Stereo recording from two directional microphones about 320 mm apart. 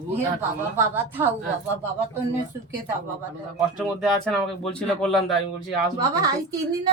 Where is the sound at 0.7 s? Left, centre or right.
Centre.